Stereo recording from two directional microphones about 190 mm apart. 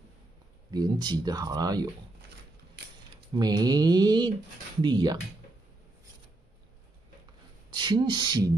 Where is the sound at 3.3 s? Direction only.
20° right (ahead or behind).